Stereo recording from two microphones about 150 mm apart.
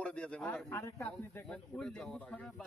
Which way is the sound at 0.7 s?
20° left (ahead or behind).